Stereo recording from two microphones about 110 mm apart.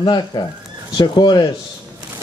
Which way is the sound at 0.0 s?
40° left (ahead or behind).